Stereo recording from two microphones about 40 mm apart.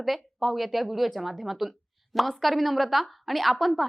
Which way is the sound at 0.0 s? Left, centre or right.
Centre.